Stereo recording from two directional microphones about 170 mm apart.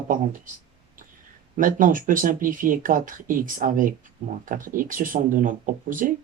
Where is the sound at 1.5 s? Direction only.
50° right (ahead or behind).